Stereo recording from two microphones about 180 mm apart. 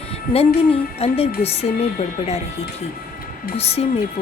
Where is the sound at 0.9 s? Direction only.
35° left (ahead or behind).